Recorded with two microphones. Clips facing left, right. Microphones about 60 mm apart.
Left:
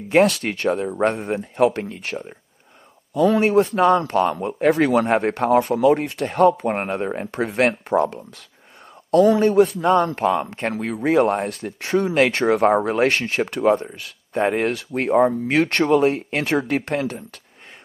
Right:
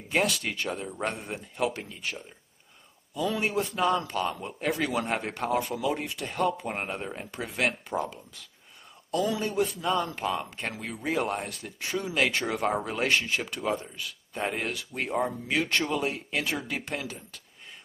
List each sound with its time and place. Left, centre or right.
0.1 s a man's voice: left